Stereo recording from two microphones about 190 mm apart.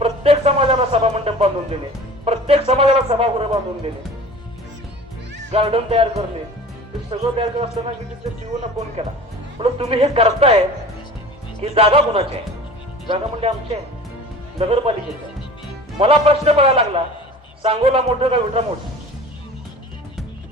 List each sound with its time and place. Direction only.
0.0 s a sound: 30° right (ahead or behind)
2.2 s speech: 30° right (ahead or behind)
5.5 s a woman's voice: 30° right (ahead or behind)
9.0 s a woman's voice: 30° right (ahead or behind)
11.6 s a woman's voice: 30° right (ahead or behind)
16.0 s a man's voice: 30° right (ahead or behind)